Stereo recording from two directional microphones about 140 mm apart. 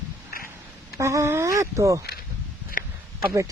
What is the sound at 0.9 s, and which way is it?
Speech, 20° right (ahead or behind).